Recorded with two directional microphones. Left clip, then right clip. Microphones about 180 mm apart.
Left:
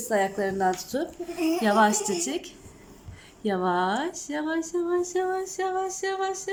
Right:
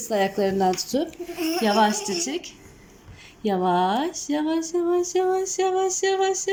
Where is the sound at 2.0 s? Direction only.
20° left (ahead or behind).